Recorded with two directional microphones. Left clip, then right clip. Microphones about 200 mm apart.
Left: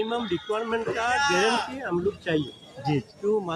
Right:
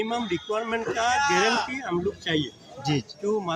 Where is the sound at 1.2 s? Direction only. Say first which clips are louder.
Left 1 dB; 60° left (ahead or behind).